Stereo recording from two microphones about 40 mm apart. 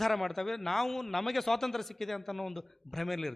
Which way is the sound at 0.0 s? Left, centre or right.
Centre.